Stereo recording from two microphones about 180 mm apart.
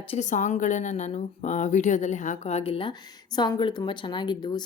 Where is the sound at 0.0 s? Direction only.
35° left (ahead or behind).